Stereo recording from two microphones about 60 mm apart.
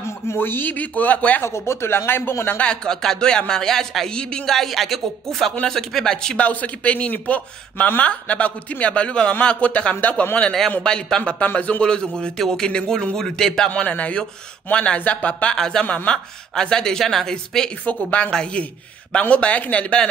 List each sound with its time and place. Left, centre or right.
0.0 s a man's voice: left
1.4 s speech: left
2.6 s a man's voice: centre
6.4 s speech: left
10.8 s a man's voice: centre
11.4 s a man's voice: left; by 13.7 s centre
13.7 s speech: left
15.5 s a man's voice: centre
17.8 s a man's voice: left